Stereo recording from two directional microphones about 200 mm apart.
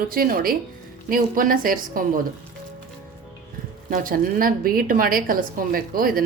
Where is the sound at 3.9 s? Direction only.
45° right (ahead or behind).